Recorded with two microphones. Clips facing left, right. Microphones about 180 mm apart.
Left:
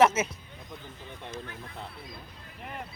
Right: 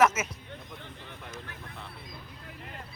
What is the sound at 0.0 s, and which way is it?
Music, 30° left (ahead or behind).